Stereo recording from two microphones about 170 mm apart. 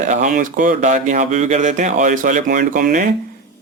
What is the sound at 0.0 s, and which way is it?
A man's voice, 50° right (ahead or behind).